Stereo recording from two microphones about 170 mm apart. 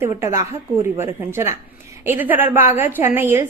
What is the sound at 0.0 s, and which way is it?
A woman's voice, 15° right (ahead or behind).